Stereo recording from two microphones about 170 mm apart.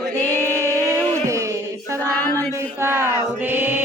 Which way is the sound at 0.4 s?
15° right (ahead or behind).